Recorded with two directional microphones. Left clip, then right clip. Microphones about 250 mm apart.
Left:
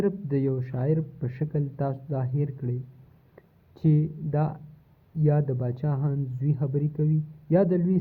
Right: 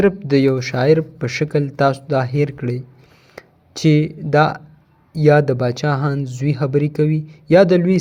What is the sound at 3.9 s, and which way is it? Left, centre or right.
Speech, centre.